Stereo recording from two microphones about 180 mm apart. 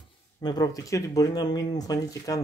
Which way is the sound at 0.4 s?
20° left (ahead or behind).